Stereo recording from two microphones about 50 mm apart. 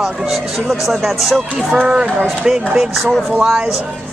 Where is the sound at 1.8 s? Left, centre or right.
Centre.